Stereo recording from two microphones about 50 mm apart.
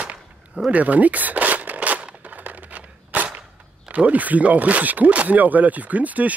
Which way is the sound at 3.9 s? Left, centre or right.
Right.